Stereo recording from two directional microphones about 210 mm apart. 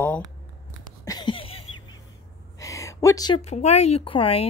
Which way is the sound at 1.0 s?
20° left (ahead or behind).